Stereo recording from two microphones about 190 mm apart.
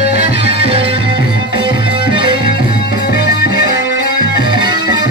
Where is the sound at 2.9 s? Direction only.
65° left (ahead or behind).